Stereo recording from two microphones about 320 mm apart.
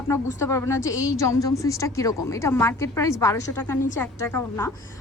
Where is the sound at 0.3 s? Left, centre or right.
Centre.